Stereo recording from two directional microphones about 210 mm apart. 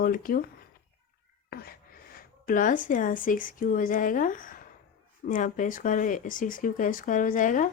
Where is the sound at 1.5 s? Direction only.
45° left (ahead or behind).